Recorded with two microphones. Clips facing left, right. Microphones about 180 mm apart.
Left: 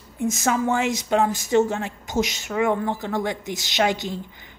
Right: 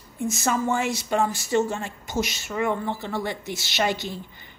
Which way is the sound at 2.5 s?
5° left (ahead or behind).